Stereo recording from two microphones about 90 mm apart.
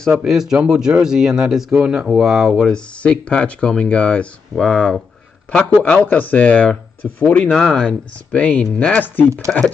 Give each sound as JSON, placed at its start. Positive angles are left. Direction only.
{"t": 0.1, "sound": "speech", "side_deg": -5}
{"t": 7.5, "sound": "speech", "side_deg": 5}